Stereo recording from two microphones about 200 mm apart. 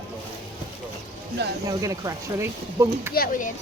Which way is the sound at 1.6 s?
15° right (ahead or behind).